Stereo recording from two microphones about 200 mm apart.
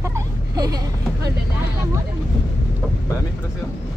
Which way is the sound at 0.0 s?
15° right (ahead or behind).